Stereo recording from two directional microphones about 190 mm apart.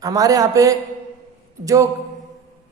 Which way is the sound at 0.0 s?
20° right (ahead or behind).